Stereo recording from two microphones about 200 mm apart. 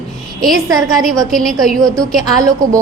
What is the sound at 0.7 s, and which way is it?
Speech, 15° right (ahead or behind).